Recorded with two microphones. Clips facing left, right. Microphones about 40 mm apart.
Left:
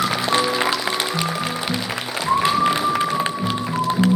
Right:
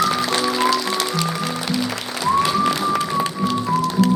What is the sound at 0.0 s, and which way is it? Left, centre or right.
Music, centre.